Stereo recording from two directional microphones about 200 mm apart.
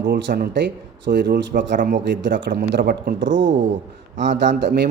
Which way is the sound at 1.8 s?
45° right (ahead or behind).